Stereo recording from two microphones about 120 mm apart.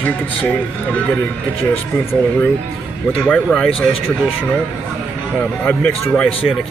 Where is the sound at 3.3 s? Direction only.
10° left (ahead or behind).